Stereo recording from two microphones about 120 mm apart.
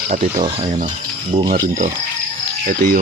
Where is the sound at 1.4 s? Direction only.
35° right (ahead or behind).